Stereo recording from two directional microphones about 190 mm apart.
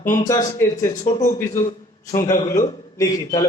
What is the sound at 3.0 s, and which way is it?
Speech, 20° left (ahead or behind).